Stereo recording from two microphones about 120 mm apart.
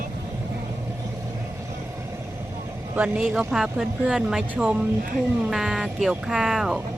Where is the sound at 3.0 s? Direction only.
5° right (ahead or behind).